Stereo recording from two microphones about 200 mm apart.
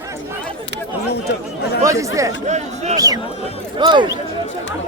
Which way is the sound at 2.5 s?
35° right (ahead or behind).